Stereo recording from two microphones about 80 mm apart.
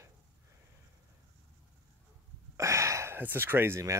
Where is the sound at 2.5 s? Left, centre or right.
Right.